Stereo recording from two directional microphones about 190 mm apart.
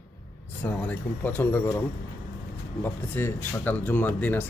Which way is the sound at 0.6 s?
10° left (ahead or behind).